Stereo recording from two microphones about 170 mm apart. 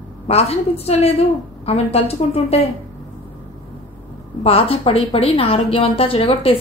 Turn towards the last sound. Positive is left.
turn(degrees=35)  # may be behind; listen again after turning